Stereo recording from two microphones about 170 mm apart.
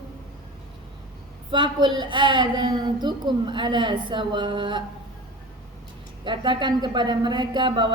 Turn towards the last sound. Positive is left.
turn(degrees=-30)  # may be behind; listen again after turning